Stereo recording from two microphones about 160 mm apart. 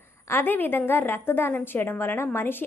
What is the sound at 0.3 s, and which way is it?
A woman's voice, 15° left (ahead or behind).